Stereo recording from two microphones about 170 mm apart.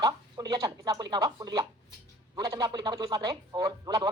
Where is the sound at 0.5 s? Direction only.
25° right (ahead or behind).